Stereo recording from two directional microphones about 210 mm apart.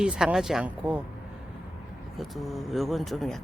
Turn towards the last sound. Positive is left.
turn(degrees=0)  # may be behind; listen again after turning